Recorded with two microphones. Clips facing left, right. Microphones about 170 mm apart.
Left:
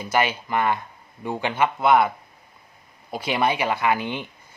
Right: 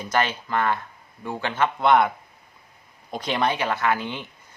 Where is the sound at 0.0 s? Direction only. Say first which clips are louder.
Left 1 dB; 10° left (ahead or behind).